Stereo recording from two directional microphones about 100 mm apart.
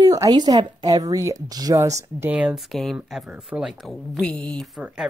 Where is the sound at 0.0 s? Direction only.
35° right (ahead or behind).